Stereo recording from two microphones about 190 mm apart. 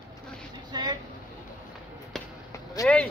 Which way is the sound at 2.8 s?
5° left (ahead or behind).